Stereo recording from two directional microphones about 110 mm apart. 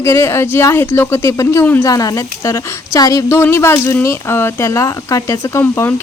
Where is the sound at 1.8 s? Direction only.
35° left (ahead or behind).